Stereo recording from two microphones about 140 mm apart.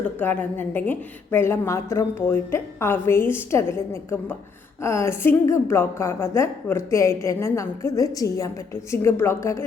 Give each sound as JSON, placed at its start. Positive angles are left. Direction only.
{"t": 0.2, "sound": "a woman's voice", "side_deg": 15}